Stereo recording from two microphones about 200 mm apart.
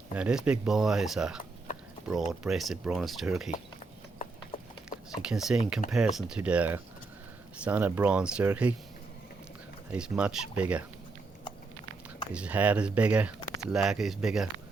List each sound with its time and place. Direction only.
0.1 s speech: 5° right (ahead or behind)
4.5 s a sound: 25° left (ahead or behind)
5.2 s speech: 5° right (ahead or behind)
9.9 s speech: 5° right (ahead or behind)
12.3 s speech: 5° right (ahead or behind)